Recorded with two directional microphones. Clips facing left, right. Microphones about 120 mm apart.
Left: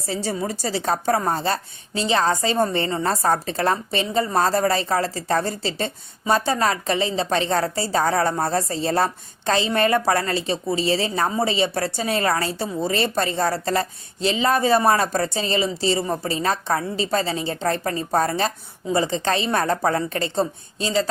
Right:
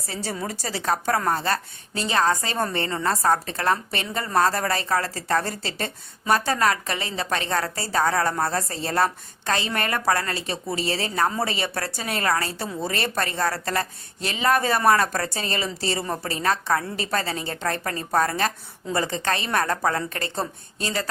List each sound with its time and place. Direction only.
0.1 s a woman's voice: 25° left (ahead or behind)